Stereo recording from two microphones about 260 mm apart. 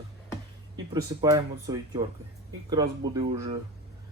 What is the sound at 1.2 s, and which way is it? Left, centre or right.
Speech, centre.